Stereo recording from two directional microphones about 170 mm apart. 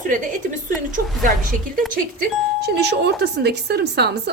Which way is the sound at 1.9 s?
70° right (ahead or behind).